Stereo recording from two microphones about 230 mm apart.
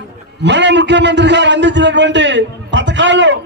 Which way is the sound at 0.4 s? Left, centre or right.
Right.